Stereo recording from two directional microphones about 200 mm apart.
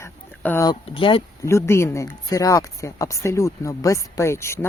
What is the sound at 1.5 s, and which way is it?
Speech, 15° left (ahead or behind).